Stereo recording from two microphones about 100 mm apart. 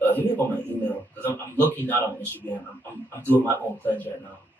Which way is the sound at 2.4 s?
15° left (ahead or behind).